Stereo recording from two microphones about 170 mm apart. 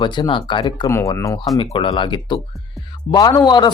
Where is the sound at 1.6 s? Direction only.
30° left (ahead or behind).